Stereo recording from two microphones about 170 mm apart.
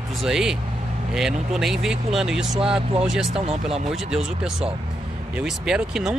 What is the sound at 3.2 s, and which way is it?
Speech, 35° right (ahead or behind).